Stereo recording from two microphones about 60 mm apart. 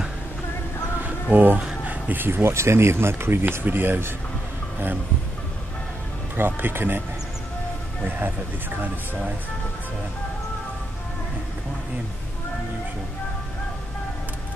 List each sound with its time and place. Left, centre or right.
1.3 s speech: right
6.3 s speech: right
8.0 s speech: right